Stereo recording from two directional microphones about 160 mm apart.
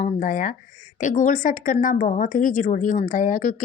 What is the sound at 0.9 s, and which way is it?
A woman's voice, 50° left (ahead or behind).